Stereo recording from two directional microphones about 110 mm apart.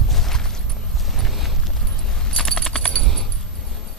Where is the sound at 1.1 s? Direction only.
Centre (ahead or behind).